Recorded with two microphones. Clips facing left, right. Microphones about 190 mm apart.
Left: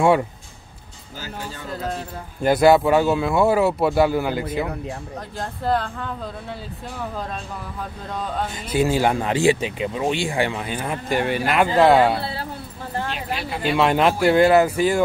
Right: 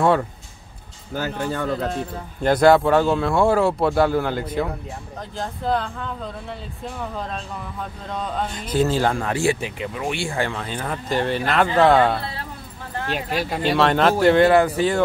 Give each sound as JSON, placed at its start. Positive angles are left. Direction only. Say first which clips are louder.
{"t": 1.1, "sound": "speech", "louder": "right 9 dB", "side_deg": -60}
{"t": 2.4, "sound": "speech", "louder": "even", "side_deg": 5}
{"t": 8.2, "sound": "speech", "louder": "even", "side_deg": 5}
{"t": 13.1, "sound": "speech", "louder": "right 4 dB", "side_deg": -45}
{"t": 13.7, "sound": "speech", "louder": "even", "side_deg": 10}